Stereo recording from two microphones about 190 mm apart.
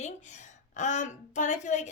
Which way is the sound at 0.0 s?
40° left (ahead or behind).